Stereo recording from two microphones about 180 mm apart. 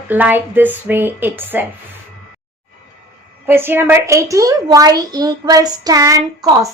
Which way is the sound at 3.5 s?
10° right (ahead or behind).